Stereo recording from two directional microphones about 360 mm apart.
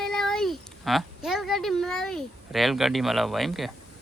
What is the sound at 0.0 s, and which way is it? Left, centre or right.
Speech, centre.